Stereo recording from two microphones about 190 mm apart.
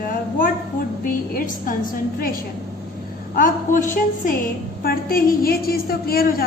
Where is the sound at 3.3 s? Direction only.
45° left (ahead or behind).